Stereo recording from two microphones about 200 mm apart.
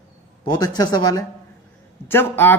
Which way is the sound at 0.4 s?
20° left (ahead or behind).